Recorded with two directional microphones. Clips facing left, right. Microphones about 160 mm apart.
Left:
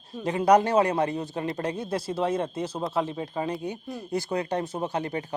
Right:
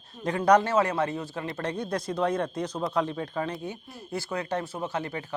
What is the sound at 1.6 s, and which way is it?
A man's voice, 10° left (ahead or behind).